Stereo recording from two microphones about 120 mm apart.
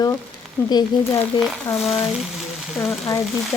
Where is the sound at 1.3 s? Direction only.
40° left (ahead or behind).